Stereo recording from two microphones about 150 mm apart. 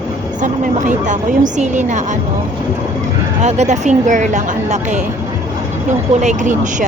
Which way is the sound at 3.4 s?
50° right (ahead or behind).